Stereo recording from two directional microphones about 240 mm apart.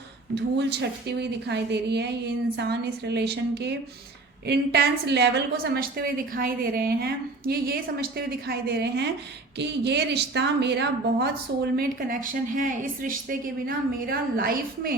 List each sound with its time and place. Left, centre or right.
0.3 s a woman's voice: right